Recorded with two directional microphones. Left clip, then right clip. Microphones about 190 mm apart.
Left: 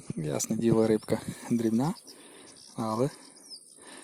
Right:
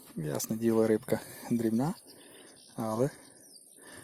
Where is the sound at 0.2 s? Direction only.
15° left (ahead or behind).